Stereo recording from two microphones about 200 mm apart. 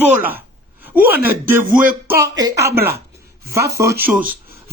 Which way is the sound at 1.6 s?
40° right (ahead or behind).